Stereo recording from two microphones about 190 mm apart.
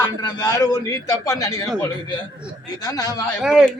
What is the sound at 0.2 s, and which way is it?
A man's voice, 20° left (ahead or behind).